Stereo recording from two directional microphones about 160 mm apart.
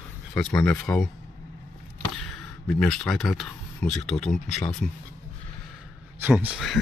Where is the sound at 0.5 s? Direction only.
10° left (ahead or behind).